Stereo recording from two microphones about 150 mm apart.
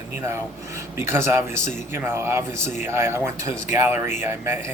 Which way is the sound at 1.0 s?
15° right (ahead or behind).